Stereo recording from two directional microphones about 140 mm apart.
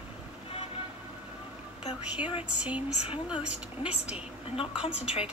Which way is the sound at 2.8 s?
45° left (ahead or behind).